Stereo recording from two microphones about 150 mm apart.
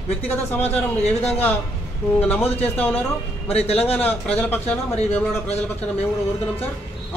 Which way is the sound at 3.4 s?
40° left (ahead or behind).